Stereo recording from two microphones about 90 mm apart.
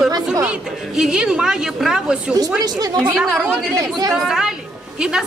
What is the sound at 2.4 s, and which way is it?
Speech, 45° right (ahead or behind).